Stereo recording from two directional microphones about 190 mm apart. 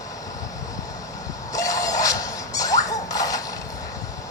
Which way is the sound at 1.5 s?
15° left (ahead or behind).